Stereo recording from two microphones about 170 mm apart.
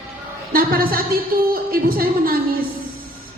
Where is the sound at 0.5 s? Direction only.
60° right (ahead or behind).